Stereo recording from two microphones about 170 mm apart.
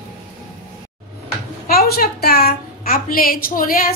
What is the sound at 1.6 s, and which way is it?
A woman's voice, 65° left (ahead or behind).